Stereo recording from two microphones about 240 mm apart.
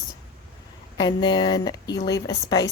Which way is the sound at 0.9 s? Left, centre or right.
Centre.